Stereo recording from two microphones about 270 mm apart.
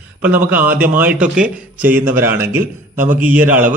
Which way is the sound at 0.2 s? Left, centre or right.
Centre.